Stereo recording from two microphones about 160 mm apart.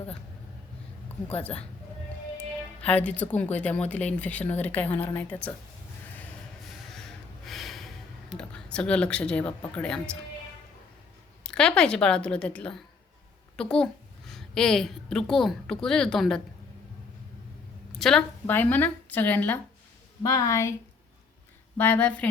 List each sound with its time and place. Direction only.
1.3 s speech: 40° left (ahead or behind)
2.8 s speech: 10° left (ahead or behind)
7.4 s a sound: centre (ahead or behind)
9.7 s a woman's voice: 5° left (ahead or behind)
11.4 s a woman's voice: 5° left (ahead or behind)
17.9 s a woman's voice: 5° left (ahead or behind)
21.8 s speech: 10° left (ahead or behind)